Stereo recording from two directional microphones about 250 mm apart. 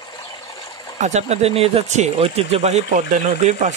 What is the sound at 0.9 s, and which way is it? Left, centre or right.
Speech, right.